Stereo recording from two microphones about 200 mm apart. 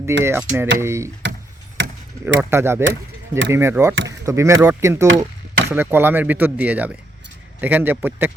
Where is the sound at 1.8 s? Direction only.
65° right (ahead or behind).